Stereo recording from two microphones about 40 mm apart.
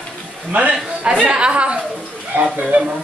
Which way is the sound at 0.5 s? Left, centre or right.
Right.